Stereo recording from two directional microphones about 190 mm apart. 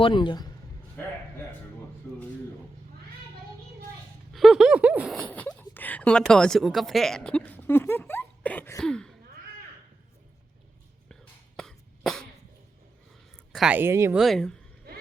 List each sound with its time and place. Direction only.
0.0 s a man's voice: 25° left (ahead or behind)
1.0 s a sound: 10° left (ahead or behind)
4.3 s a sound: centre (ahead or behind)
5.1 s speech: 5° left (ahead or behind)
11.1 s throat clearing: centre (ahead or behind)
13.5 s speech: 5° right (ahead or behind)
14.2 s speech: centre (ahead or behind)